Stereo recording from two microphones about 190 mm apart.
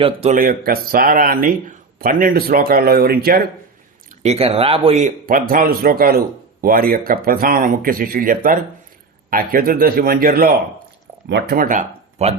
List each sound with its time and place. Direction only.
0.0 s a man's voice: 30° right (ahead or behind)
0.3 s speech: 50° right (ahead or behind)
4.2 s a man's voice: 35° right (ahead or behind); by 10.5 s 50° right (ahead or behind)
11.3 s speech: 60° right (ahead or behind); by 12.3 s 45° right (ahead or behind)